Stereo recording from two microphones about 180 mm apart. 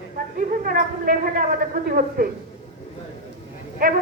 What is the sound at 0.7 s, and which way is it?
A man's voice, 50° right (ahead or behind).